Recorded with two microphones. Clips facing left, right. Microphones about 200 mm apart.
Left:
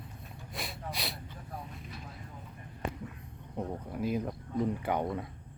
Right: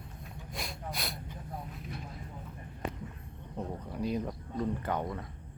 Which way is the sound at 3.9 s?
5° left (ahead or behind).